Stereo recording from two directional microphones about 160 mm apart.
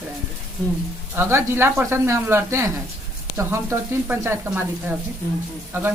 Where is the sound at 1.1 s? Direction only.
15° right (ahead or behind).